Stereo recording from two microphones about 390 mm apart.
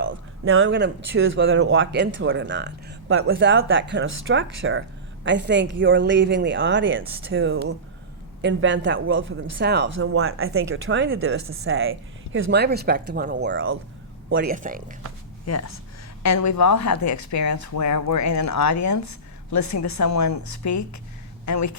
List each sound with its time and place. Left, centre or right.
0.0 s speech: right
15.4 s speech: left